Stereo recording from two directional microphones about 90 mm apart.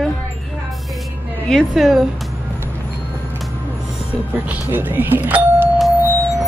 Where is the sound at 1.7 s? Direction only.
Centre (ahead or behind).